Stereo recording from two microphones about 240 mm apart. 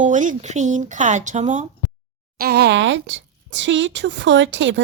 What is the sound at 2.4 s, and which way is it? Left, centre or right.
Speech, right.